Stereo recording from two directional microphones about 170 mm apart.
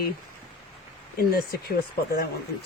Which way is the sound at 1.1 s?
65° left (ahead or behind).